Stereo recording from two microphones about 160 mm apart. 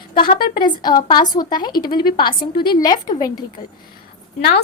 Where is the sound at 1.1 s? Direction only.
25° left (ahead or behind).